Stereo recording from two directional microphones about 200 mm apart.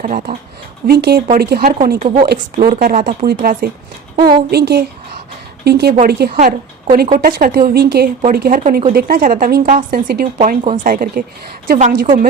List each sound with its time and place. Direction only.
0.0 s speech: 40° right (ahead or behind)
0.9 s speech: 55° right (ahead or behind)